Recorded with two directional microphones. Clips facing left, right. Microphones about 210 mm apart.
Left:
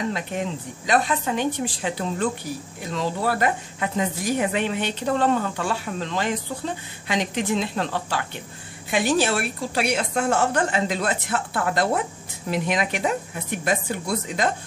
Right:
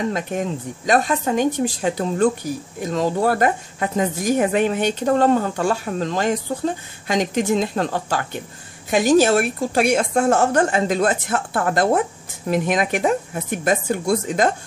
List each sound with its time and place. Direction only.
0.1 s a woman's voice: 45° right (ahead or behind)